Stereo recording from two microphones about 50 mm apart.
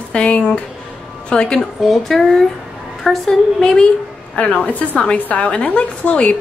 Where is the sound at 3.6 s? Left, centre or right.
Centre.